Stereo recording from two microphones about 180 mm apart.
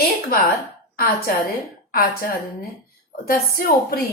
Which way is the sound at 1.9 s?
55° left (ahead or behind).